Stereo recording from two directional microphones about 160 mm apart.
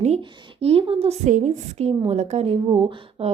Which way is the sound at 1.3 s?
50° right (ahead or behind).